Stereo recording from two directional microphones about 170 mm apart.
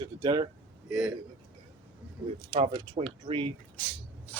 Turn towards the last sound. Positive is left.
turn(degrees=10)  # may be behind; listen again after turning